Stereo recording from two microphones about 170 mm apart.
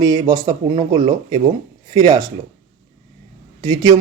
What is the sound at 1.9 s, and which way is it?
Speech, 25° right (ahead or behind).